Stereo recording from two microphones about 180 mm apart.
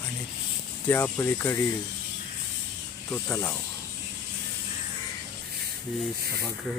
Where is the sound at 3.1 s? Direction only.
10° left (ahead or behind).